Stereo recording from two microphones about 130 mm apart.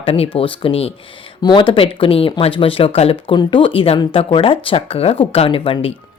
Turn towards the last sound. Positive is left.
turn(degrees=45)  # may be behind; listen again after turning